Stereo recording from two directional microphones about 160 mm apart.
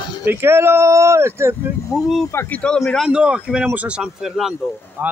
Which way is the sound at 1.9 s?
Centre (ahead or behind).